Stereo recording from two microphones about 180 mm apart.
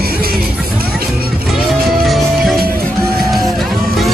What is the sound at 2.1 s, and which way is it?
Music, centre (ahead or behind).